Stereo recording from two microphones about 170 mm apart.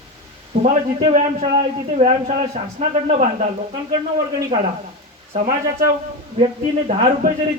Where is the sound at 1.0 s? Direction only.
40° right (ahead or behind).